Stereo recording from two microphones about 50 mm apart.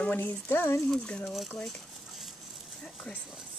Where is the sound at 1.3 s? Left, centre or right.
Centre.